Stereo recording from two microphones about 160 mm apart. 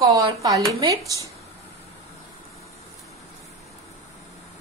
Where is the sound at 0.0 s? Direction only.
25° right (ahead or behind).